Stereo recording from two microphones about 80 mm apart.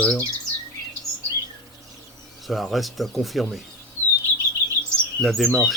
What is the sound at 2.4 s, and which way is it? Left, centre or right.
A man's voice, centre.